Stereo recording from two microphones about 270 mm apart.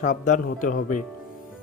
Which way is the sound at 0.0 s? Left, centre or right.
Left.